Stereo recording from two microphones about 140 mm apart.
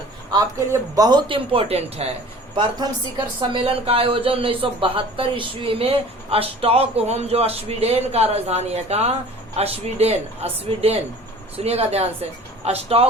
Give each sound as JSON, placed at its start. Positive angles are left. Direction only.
{"t": 0.3, "sound": "speech", "side_deg": -25}
{"t": 3.4, "sound": "a man's voice", "side_deg": -40}